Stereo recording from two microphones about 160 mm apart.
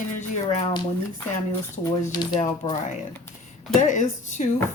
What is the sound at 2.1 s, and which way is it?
Speech, 25° left (ahead or behind).